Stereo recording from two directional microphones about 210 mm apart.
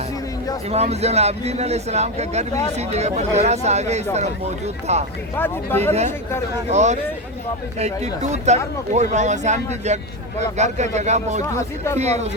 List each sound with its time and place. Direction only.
0.7 s speech: 30° right (ahead or behind)
5.4 s speech: 10° left (ahead or behind)
6.7 s speech: 35° right (ahead or behind)
10.6 s speech: 35° right (ahead or behind)